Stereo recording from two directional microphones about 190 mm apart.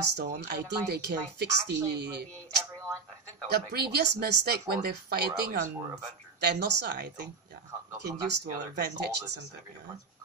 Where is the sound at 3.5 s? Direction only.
55° right (ahead or behind).